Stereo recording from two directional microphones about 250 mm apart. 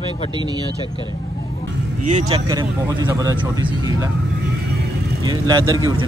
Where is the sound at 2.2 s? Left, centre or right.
Centre.